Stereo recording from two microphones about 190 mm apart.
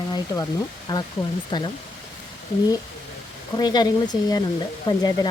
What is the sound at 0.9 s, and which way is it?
Speech, 20° left (ahead or behind).